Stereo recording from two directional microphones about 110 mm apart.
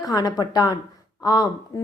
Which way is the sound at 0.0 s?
35° left (ahead or behind).